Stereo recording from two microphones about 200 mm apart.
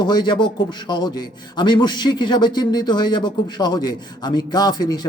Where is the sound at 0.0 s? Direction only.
20° left (ahead or behind).